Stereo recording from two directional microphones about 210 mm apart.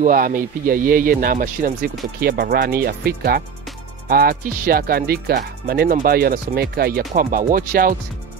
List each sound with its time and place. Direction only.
0.0 s speech: 40° right (ahead or behind)